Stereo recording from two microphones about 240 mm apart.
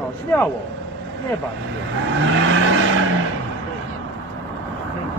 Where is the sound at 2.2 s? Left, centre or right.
Right.